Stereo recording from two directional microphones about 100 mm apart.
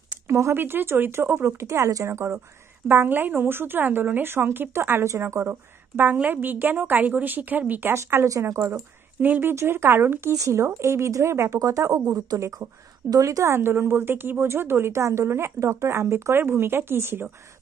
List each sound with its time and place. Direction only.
0.1 s a woman's voice: 25° right (ahead or behind)